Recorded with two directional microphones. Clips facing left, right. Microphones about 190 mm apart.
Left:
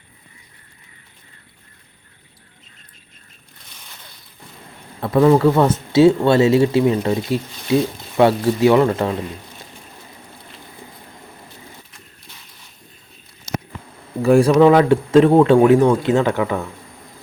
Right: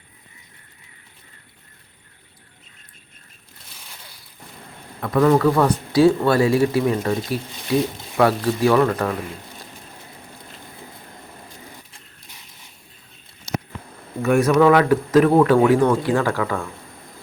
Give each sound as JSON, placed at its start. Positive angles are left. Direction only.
{"t": 3.7, "sound": "a sound", "side_deg": -5}
{"t": 5.0, "sound": "speech", "side_deg": 30}
{"t": 14.2, "sound": "speech", "side_deg": 30}